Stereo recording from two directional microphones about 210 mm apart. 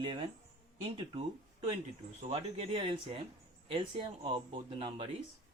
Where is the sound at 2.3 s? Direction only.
30° right (ahead or behind).